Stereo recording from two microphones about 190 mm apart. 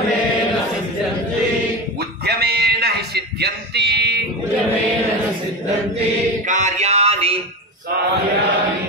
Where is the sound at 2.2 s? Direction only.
60° right (ahead or behind).